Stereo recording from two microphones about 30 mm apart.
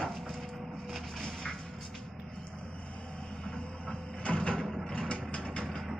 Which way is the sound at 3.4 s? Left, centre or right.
Left.